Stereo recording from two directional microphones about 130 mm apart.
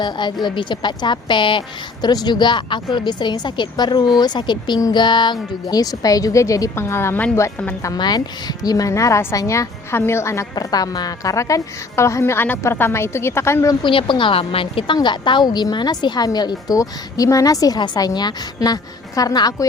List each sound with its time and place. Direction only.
0.0 s a woman's voice: 35° left (ahead or behind); by 7.3 s 20° left (ahead or behind)
7.8 s a woman's voice: 30° left (ahead or behind)
13.8 s a woman's voice: 40° left (ahead or behind)